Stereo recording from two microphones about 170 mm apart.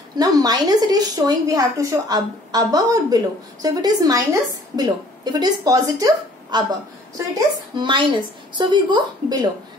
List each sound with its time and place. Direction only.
0.2 s a woman's voice: 20° right (ahead or behind)